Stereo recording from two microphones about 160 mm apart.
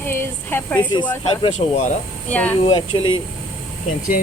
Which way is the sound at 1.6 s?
30° left (ahead or behind).